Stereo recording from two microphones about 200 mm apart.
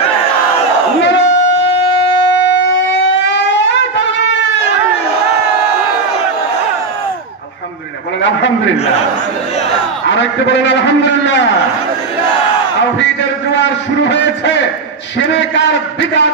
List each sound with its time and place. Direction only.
1.0 s crowd: 60° left (ahead or behind)
2.3 s siren: 65° left (ahead or behind)
10.0 s a man's voice: 60° left (ahead or behind)
13.6 s a sound: 60° left (ahead or behind)
15.3 s a man's voice: 60° left (ahead or behind)